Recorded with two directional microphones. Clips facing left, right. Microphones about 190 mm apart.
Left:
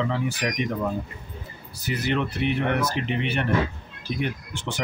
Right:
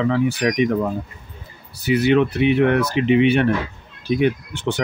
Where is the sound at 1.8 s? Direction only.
65° right (ahead or behind).